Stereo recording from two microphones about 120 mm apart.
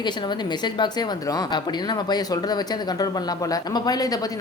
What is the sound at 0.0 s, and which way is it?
A woman's voice, 40° left (ahead or behind).